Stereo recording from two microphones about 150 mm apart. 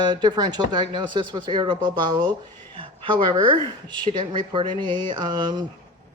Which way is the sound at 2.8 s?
35° right (ahead or behind).